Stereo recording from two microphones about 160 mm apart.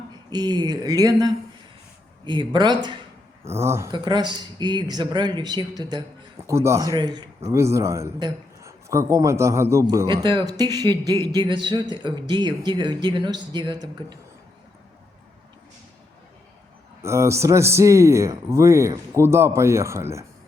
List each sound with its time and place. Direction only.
0.3 s a man's voice: 25° right (ahead or behind)
3.4 s a man's voice: 15° right (ahead or behind)
3.9 s a man's voice: 25° right (ahead or behind)
17.0 s a man's voice: 15° right (ahead or behind)